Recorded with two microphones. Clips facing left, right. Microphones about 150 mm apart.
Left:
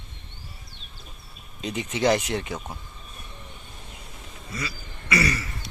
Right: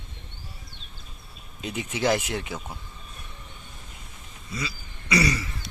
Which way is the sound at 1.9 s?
5° right (ahead or behind).